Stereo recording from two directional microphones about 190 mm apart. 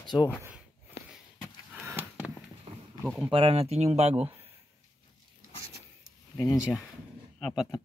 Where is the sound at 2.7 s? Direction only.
30° right (ahead or behind).